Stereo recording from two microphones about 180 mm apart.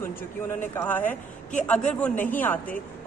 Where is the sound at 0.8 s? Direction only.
10° left (ahead or behind).